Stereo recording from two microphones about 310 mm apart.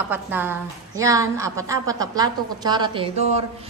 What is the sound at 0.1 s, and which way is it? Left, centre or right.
A woman's voice, centre.